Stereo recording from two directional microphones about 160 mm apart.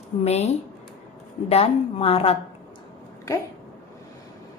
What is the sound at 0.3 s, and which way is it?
A woman's voice, 40° left (ahead or behind).